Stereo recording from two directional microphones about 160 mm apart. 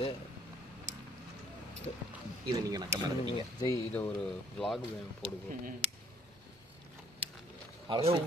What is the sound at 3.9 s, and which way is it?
Speech, 5° left (ahead or behind).